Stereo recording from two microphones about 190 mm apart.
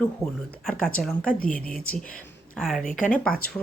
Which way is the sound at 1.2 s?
45° left (ahead or behind).